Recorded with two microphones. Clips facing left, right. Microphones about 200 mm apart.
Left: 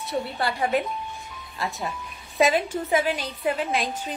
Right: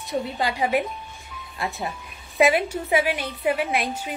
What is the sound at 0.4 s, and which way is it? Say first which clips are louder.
Speech: right 1 dB; 15° right (ahead or behind).